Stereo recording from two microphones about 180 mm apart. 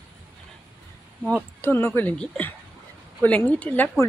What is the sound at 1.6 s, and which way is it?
Speech, 10° left (ahead or behind).